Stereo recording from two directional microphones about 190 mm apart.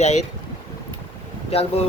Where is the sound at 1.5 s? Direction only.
30° left (ahead or behind).